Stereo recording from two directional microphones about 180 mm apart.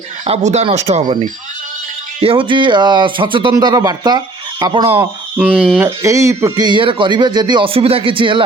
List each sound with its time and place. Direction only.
0.3 s speech: 35° right (ahead or behind)
2.2 s speech: 30° right (ahead or behind)
5.4 s speech: 5° right (ahead or behind)
6.0 s speech: 15° right (ahead or behind)